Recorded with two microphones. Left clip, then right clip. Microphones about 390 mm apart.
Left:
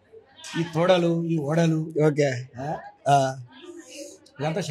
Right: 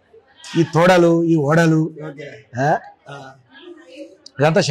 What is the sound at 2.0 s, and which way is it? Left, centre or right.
Speech, left.